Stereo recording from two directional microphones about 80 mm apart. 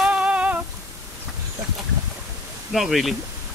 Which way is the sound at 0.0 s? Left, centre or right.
Centre.